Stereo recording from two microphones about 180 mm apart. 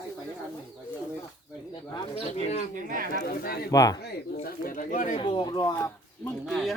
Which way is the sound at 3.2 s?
60° left (ahead or behind).